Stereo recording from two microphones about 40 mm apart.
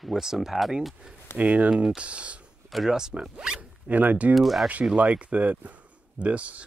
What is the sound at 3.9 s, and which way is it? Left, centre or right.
Speech, right.